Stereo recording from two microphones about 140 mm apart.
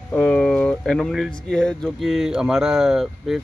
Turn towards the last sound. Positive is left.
turn(degrees=0)  # may be behind; listen again after turning